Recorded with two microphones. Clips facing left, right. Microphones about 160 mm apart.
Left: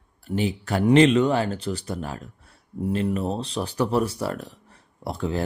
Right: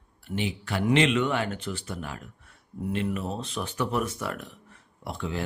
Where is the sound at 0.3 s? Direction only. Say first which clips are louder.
Left 6 dB; 40° left (ahead or behind).